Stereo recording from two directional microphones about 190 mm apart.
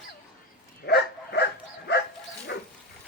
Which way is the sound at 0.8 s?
60° left (ahead or behind).